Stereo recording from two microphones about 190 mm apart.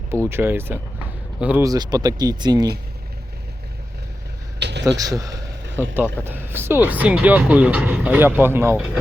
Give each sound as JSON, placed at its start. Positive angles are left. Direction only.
{"t": 0.3, "sound": "speech", "side_deg": -10}
{"t": 1.6, "sound": "speech", "side_deg": -20}
{"t": 4.6, "sound": "a sound", "side_deg": -65}
{"t": 4.9, "sound": "speech", "side_deg": -20}